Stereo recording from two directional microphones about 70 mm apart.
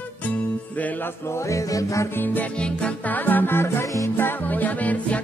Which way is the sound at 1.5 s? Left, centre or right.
Left.